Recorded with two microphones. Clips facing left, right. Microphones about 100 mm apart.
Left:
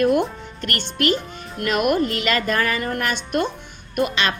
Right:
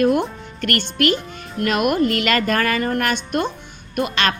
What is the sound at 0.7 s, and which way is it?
Speech, 30° left (ahead or behind).